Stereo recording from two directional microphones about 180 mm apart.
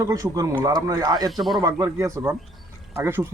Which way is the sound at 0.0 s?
20° right (ahead or behind).